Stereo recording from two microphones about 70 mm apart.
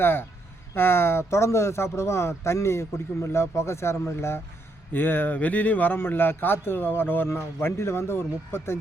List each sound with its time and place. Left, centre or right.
0.0 s speech: left